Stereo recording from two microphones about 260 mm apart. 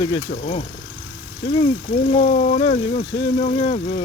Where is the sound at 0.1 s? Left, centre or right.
Left.